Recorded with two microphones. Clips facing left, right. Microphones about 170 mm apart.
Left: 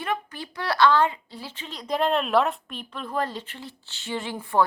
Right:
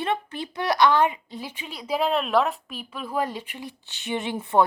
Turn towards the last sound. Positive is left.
turn(degrees=-20)  # may be behind; listen again after turning